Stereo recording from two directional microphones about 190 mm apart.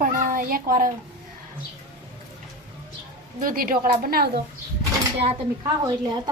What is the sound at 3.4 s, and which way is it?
Speech, 50° right (ahead or behind).